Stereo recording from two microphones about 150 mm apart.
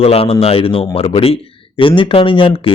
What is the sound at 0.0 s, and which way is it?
A man's voice, 40° left (ahead or behind).